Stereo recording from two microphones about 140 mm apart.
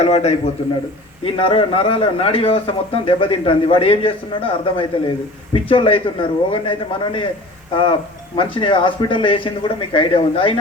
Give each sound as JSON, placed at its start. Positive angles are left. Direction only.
{"t": 0.0, "sound": "a man's voice", "side_deg": 50}